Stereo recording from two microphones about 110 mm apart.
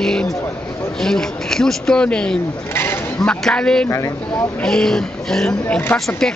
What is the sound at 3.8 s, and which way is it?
Speech, 30° left (ahead or behind).